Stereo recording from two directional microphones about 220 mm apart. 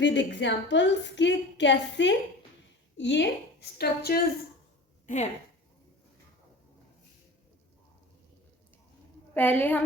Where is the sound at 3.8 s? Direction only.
45° left (ahead or behind).